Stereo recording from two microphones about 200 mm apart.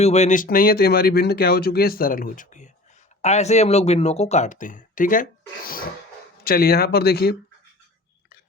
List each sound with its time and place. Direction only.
0.0 s speech: 35° left (ahead or behind); by 7.3 s 50° left (ahead or behind)